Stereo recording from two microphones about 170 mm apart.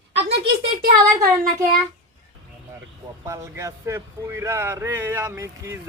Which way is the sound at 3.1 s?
15° right (ahead or behind).